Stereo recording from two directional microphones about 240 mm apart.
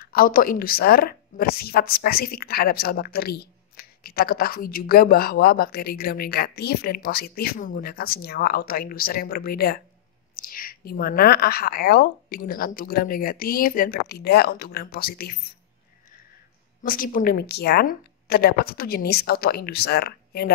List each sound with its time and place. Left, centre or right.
0.0 s a woman's voice: left
16.8 s a woman's voice: left